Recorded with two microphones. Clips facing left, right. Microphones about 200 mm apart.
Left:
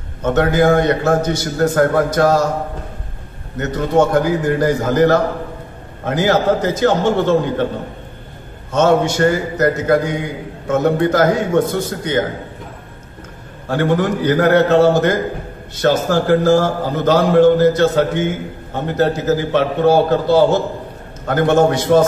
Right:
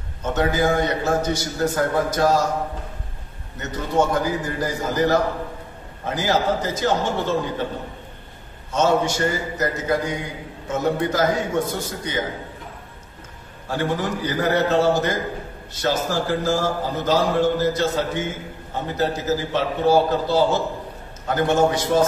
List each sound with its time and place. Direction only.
0.2 s a man's voice: 65° left (ahead or behind)
3.5 s a man's voice: 60° left (ahead or behind)
8.7 s a man's voice: 60° left (ahead or behind)
13.7 s a man's voice: 60° left (ahead or behind)